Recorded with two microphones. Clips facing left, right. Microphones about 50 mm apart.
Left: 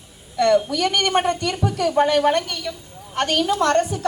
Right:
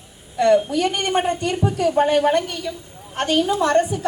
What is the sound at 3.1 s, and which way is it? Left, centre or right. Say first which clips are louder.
Speech: right 1 dB; left.